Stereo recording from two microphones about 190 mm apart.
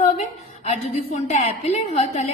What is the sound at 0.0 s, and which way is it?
A woman's voice, 35° left (ahead or behind).